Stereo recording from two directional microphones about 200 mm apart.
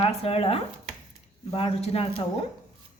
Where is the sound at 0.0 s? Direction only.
30° left (ahead or behind).